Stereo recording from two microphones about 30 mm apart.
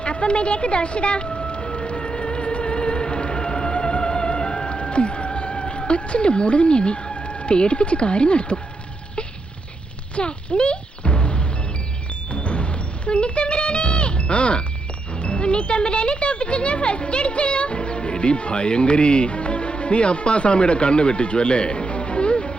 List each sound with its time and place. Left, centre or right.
0.0 s music: left
10.2 s music: left
15.1 s speech: left